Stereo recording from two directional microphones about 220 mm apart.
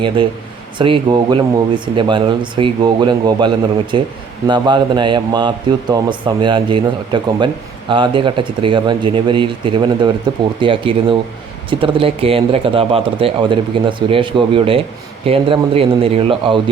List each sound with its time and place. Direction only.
0.8 s a man's voice: 20° right (ahead or behind)